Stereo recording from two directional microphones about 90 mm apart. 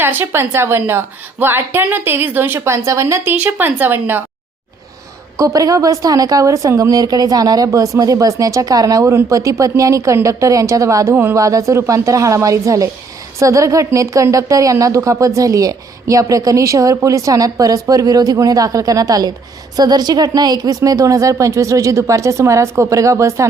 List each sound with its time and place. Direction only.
0.0 s a woman's voice: 25° right (ahead or behind)
3.3 s a woman's voice: 20° right (ahead or behind)
5.4 s speech: 35° right (ahead or behind)
11.3 s speech: 35° right (ahead or behind)